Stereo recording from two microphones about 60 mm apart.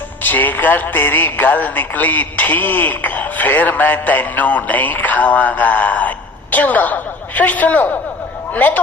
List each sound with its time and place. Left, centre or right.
0.2 s speech: left